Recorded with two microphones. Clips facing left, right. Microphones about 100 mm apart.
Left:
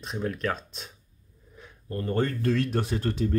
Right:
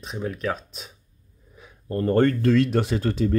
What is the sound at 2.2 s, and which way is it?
Speech, 75° right (ahead or behind).